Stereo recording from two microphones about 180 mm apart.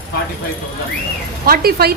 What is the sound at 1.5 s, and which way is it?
Speech, 60° right (ahead or behind).